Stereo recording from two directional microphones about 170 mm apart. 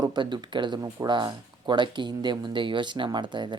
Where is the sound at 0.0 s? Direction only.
25° right (ahead or behind).